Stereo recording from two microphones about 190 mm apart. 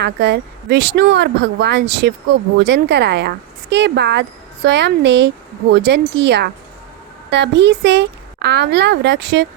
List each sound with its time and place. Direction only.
0.0 s speech: 60° right (ahead or behind)